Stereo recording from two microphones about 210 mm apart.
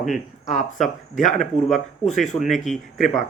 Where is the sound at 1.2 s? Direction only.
Centre (ahead or behind).